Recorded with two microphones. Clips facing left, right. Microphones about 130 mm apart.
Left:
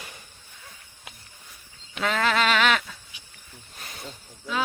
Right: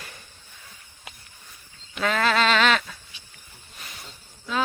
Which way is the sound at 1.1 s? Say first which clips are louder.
Right 1 dB; centre (ahead or behind).